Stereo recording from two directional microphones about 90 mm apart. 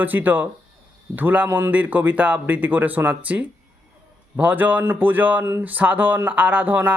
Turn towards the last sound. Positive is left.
turn(degrees=-20)  # may be behind; listen again after turning